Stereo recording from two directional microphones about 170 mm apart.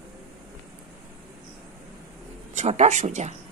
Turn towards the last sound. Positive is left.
turn(degrees=-40)  # may be behind; listen again after turning